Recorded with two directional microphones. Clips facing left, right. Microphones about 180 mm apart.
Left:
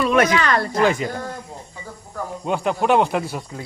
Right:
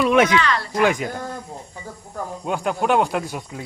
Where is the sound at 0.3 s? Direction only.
45° left (ahead or behind).